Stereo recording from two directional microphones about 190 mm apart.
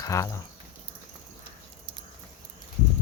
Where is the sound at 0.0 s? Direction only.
15° left (ahead or behind).